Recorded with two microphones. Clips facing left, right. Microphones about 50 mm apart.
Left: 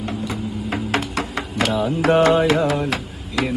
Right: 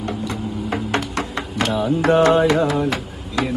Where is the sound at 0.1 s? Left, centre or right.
Centre.